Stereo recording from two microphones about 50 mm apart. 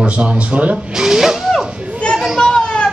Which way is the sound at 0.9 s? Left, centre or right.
Centre.